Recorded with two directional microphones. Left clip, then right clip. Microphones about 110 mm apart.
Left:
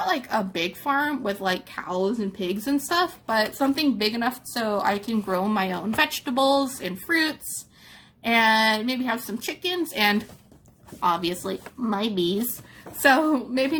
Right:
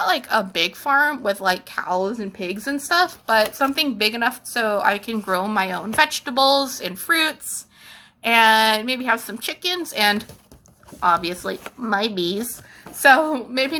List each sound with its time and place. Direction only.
0.0 s a woman's voice: 40° left (ahead or behind)
2.1 s a woman's voice: 45° left (ahead or behind)